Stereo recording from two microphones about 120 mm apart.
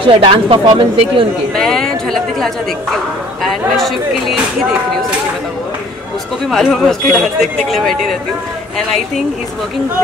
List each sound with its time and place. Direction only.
0.0 s speech: 45° right (ahead or behind)
1.5 s speech: 5° left (ahead or behind)
3.7 s speech: centre (ahead or behind)
6.5 s speech: centre (ahead or behind)